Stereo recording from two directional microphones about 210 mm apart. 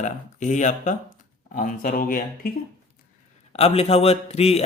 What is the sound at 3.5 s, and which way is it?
A man's voice, 30° left (ahead or behind).